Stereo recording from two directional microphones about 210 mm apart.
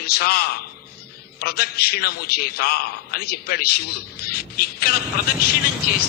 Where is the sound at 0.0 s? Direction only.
50° left (ahead or behind).